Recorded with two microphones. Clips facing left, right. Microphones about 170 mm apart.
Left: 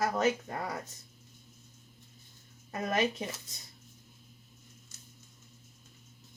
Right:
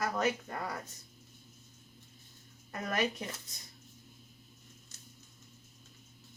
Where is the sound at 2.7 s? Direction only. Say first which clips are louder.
Left 3 dB; 25° left (ahead or behind).